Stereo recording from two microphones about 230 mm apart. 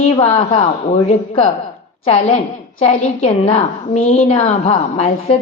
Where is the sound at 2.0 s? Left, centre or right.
Left.